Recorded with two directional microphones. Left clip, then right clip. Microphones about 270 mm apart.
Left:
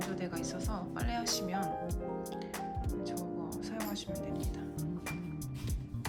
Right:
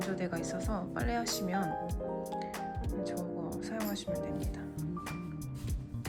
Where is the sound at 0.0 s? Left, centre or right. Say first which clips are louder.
Right 2 dB; centre.